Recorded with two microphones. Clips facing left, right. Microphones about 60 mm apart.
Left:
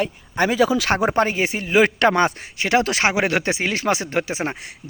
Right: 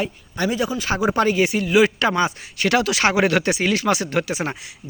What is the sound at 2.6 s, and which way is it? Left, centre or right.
Speech, left.